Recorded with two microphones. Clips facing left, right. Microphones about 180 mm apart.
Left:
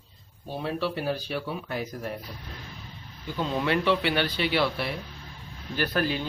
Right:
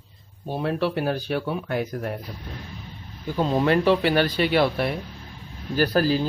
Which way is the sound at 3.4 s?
40° right (ahead or behind).